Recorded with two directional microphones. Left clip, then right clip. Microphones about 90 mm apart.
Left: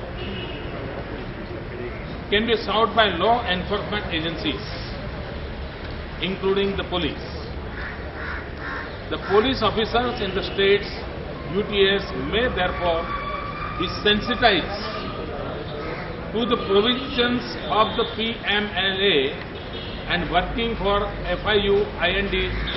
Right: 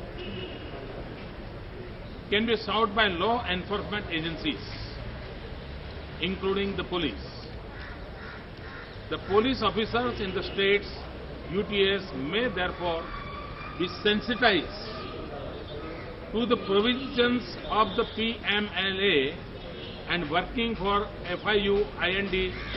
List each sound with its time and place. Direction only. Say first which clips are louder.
2.3 s a man's voice: left 5 dB; 20° left (ahead or behind)
6.2 s a man's voice: left 6 dB; 20° left (ahead or behind)
9.1 s a man's voice: left 5 dB; 20° left (ahead or behind)
16.3 s a man's voice: left 5 dB; 20° left (ahead or behind)